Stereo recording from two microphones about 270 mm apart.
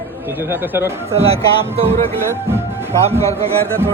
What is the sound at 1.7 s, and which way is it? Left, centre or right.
Speech, right.